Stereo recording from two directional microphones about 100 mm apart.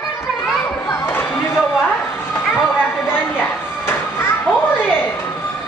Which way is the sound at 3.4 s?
25° left (ahead or behind).